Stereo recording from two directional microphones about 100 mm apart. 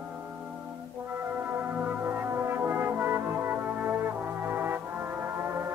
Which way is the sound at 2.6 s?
20° right (ahead or behind).